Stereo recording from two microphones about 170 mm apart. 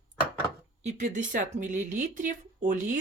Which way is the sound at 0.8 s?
45° right (ahead or behind).